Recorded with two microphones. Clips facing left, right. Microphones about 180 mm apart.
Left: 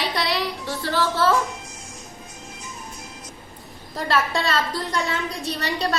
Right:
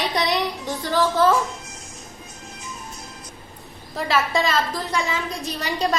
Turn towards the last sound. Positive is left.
turn(degrees=-10)  # may be behind; listen again after turning